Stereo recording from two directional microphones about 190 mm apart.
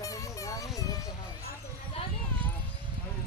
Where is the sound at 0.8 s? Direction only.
20° left (ahead or behind).